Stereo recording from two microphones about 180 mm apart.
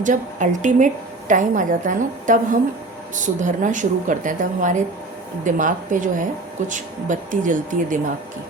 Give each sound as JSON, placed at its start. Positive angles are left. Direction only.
{"t": 0.0, "sound": "speech", "side_deg": -45}